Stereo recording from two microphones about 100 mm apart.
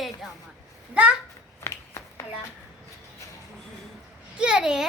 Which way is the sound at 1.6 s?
30° left (ahead or behind).